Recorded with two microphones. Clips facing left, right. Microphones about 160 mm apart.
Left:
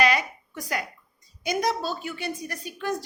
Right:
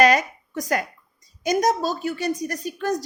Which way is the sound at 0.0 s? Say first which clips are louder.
Right 6 dB; 45° right (ahead or behind).